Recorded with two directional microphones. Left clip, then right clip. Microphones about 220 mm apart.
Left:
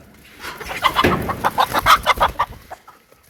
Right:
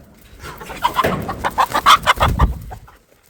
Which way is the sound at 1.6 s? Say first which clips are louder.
Right 3 dB; 15° left (ahead or behind).